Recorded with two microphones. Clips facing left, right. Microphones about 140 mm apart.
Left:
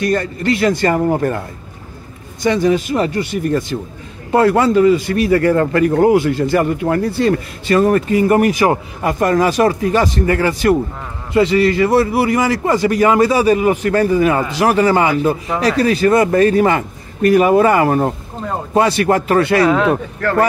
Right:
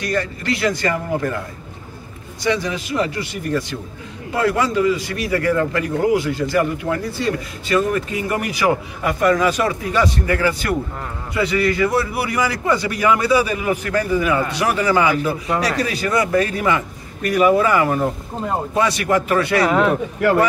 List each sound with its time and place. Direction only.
0.0 s a man's voice: 50° left (ahead or behind)
2.4 s a man's voice: 45° left (ahead or behind)
10.3 s speech: 25° left (ahead or behind)
11.8 s a man's voice: 45° left (ahead or behind)
15.4 s speech: 5° left (ahead or behind)
15.8 s a man's voice: 50° left (ahead or behind)
19.6 s speech: 10° right (ahead or behind)